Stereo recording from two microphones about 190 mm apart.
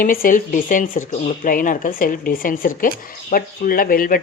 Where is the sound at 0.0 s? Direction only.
45° left (ahead or behind).